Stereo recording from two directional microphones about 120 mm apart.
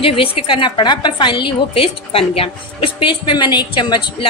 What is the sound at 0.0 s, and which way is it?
A woman's voice, 50° left (ahead or behind).